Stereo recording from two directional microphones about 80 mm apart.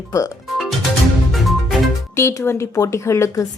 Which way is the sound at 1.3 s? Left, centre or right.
Centre.